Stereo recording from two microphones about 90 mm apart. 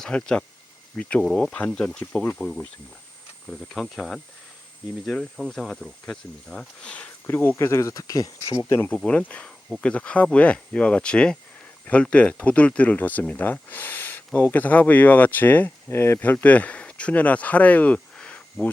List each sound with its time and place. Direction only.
0.0 s speech: 10° left (ahead or behind)
1.2 s speech: 5° left (ahead or behind)
1.5 s speech: 15° left (ahead or behind)
7.5 s speech: 30° left (ahead or behind)
8.7 s speech: 20° left (ahead or behind)